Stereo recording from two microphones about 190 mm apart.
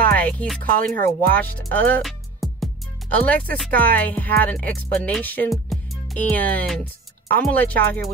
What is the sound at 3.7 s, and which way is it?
Speech, 50° right (ahead or behind).